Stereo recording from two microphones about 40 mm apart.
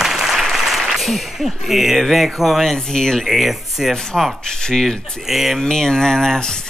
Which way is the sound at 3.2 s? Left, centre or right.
Centre.